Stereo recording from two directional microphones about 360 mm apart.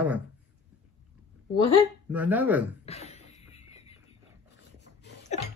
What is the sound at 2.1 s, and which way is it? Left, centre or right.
Speech, centre.